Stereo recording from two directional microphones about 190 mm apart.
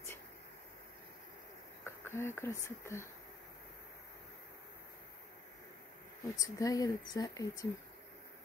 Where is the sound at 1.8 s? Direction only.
15° left (ahead or behind).